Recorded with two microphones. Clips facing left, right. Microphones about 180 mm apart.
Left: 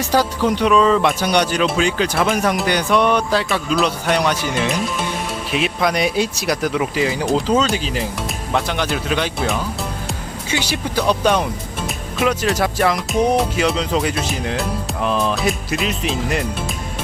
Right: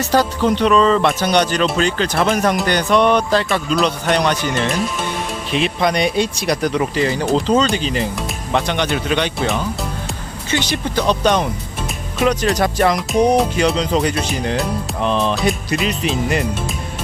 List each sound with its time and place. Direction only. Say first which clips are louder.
0.0 s speech: right 1 dB; 10° left (ahead or behind)